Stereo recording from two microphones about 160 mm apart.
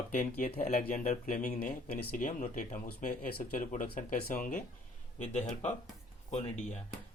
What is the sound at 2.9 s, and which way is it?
Speech, 65° left (ahead or behind).